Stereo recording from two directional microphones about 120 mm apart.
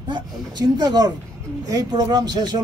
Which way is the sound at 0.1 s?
35° right (ahead or behind).